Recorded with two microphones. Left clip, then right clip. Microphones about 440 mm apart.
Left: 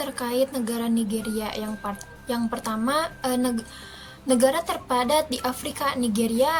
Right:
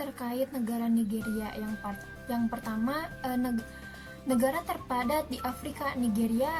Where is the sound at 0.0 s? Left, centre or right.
Right.